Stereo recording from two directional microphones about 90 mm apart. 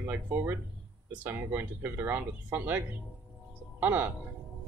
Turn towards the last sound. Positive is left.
turn(degrees=-20)  # may be behind; listen again after turning